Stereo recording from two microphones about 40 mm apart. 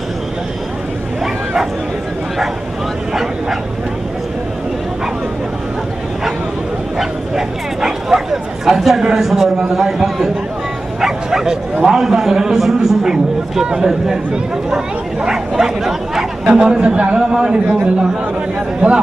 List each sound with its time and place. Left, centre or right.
1.2 s a sound: centre
3.1 s speech: centre
7.0 s bow-wow: centre
9.2 s a man's voice: centre
18.8 s speech: right